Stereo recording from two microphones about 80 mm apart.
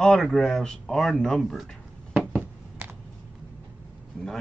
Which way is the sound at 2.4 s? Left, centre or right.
Right.